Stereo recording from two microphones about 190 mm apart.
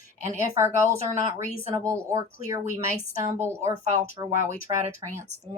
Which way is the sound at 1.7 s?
15° right (ahead or behind).